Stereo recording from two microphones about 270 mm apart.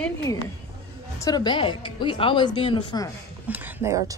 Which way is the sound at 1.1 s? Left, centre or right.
Centre.